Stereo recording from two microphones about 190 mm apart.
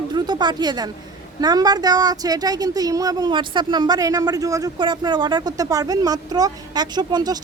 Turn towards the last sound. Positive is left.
turn(degrees=-20)  # may be behind; listen again after turning